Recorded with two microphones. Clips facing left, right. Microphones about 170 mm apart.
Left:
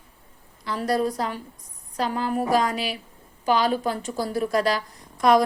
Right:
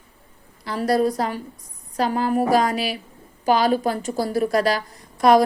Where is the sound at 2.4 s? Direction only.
10° right (ahead or behind).